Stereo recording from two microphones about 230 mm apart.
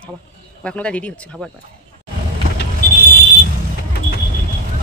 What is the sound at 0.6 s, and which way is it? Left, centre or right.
Speech, centre.